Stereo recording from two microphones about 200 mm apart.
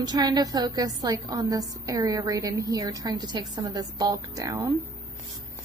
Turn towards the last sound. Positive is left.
turn(degrees=-15)  # may be behind; listen again after turning